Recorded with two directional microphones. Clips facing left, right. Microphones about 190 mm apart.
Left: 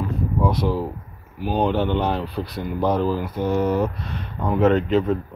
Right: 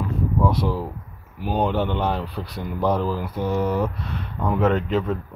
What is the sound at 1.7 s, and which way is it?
Speech, 25° left (ahead or behind).